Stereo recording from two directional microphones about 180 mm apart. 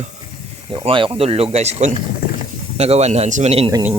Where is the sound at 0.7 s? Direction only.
25° right (ahead or behind).